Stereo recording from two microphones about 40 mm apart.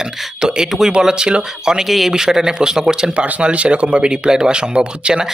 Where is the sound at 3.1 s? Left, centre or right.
Right.